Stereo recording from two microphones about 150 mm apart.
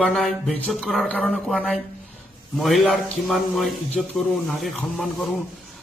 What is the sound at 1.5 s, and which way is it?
A man's voice, 5° right (ahead or behind).